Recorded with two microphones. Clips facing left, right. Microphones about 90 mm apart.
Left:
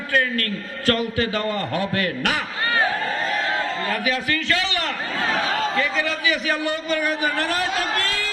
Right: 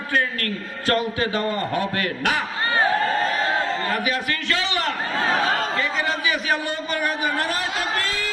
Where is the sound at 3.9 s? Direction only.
20° right (ahead or behind).